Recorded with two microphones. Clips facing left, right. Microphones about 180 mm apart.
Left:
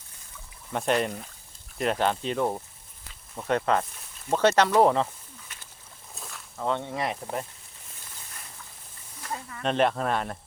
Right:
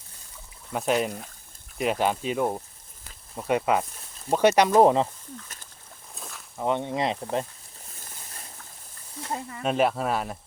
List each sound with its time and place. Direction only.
0.7 s speech: 5° right (ahead or behind)
5.5 s a sound: 40° right (ahead or behind)
6.1 s a sound: centre (ahead or behind)
6.6 s speech: 15° right (ahead or behind)
9.2 s speech: 25° right (ahead or behind)
9.6 s speech: 5° right (ahead or behind)